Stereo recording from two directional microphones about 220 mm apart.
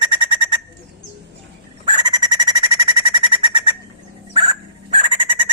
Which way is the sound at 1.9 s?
20° right (ahead or behind).